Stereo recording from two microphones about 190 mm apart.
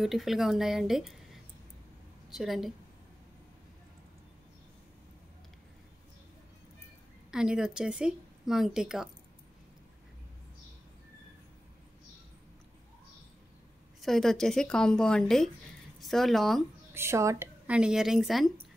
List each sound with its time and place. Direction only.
0.0 s speech: centre (ahead or behind)
7.2 s speech: 5° right (ahead or behind)
14.0 s speech: centre (ahead or behind)
16.9 s speech: 15° right (ahead or behind)